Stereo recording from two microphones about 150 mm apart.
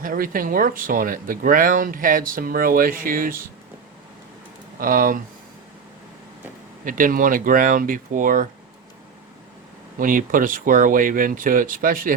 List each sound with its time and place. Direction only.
0.0 s speech: 65° right (ahead or behind)
4.8 s speech: 65° right (ahead or behind)
6.8 s speech: 65° right (ahead or behind)
10.0 s speech: 65° right (ahead or behind)